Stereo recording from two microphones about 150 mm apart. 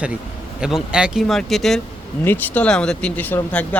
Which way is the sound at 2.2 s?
10° left (ahead or behind).